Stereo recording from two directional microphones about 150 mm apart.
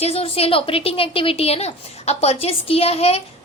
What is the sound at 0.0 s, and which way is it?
A woman's voice, 40° left (ahead or behind).